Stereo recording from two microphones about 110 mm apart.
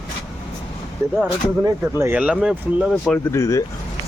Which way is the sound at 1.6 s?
25° right (ahead or behind).